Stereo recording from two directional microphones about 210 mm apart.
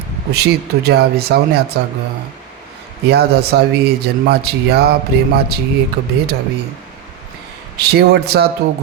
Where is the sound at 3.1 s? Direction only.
50° right (ahead or behind).